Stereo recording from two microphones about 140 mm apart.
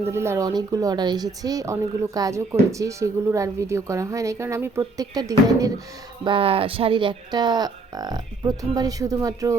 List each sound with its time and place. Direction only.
0.0 s a woman's voice: 20° right (ahead or behind)
6.2 s speech: 40° right (ahead or behind); by 9.6 s 25° right (ahead or behind)